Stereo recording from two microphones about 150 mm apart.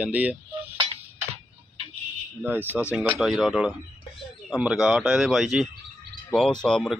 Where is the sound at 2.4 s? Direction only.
10° right (ahead or behind).